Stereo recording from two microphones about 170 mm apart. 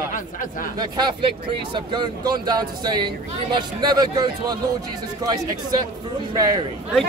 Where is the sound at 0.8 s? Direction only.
25° right (ahead or behind).